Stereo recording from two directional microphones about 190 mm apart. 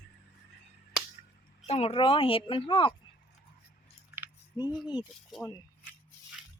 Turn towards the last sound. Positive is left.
turn(degrees=15)  # may be behind; listen again after turning